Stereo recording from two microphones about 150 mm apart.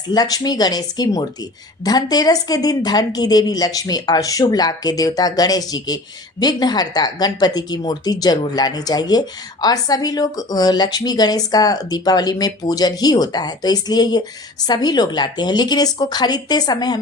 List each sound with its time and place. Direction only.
0.1 s speech: 25° left (ahead or behind)